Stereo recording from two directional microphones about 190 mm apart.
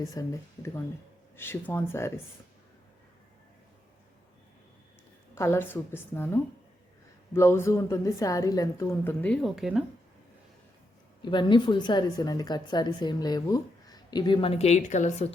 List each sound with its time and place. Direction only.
0.0 s a woman's voice: 15° left (ahead or behind)
5.3 s a woman's voice: 15° left (ahead or behind); by 9.8 s 5° right (ahead or behind)
11.2 s a woman's voice: 25° left (ahead or behind)